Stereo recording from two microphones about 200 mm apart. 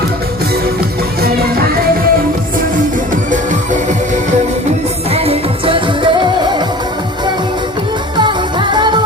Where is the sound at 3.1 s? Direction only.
40° right (ahead or behind).